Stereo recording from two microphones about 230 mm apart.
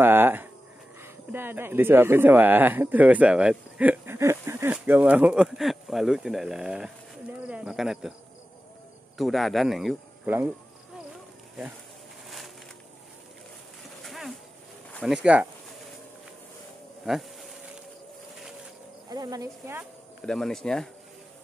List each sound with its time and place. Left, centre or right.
0.0 s a sound: centre
1.0 s speech: centre
9.2 s speech: centre
14.0 s a sound: centre
17.0 s bee: centre
19.0 s speech: centre
20.2 s speech: centre